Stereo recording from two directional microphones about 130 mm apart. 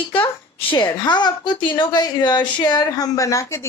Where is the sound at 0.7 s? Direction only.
35° left (ahead or behind).